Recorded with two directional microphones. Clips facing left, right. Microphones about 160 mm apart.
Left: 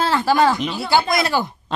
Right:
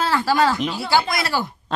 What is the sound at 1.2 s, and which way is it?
Speech, 20° left (ahead or behind).